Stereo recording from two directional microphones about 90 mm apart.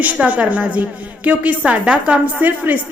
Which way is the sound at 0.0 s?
15° right (ahead or behind).